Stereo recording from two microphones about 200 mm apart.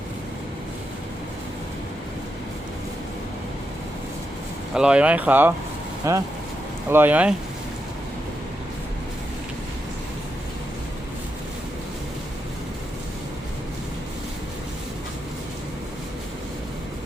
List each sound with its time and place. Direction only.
4.7 s speech: 5° right (ahead or behind)